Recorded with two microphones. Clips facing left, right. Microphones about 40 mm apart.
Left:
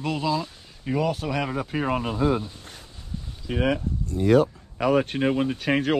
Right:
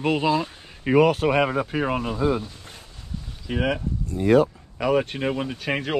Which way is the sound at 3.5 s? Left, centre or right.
Right.